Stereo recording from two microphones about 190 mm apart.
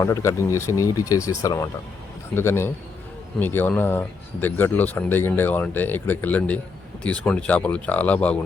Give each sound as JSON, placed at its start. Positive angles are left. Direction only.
{"t": 0.0, "sound": "speech", "side_deg": 15}